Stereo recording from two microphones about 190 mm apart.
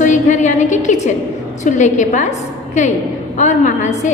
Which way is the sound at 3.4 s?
40° left (ahead or behind).